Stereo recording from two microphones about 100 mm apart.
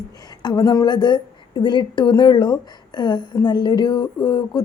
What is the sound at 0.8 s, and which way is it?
Speech, 50° left (ahead or behind).